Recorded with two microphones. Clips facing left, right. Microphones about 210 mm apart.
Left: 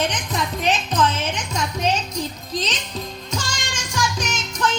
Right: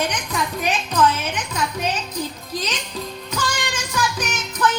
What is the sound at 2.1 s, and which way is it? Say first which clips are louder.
Music: left 1 dB; 10° right (ahead or behind).